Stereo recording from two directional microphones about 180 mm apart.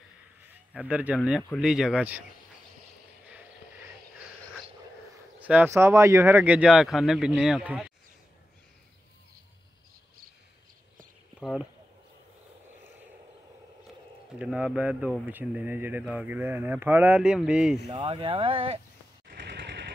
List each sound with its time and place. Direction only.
0.7 s speech: 5° right (ahead or behind)
5.4 s speech: 10° right (ahead or behind)
11.3 s speech: centre (ahead or behind)
14.4 s speech: 5° right (ahead or behind)
17.8 s speech: 25° right (ahead or behind)
19.4 s machine gun: 70° right (ahead or behind)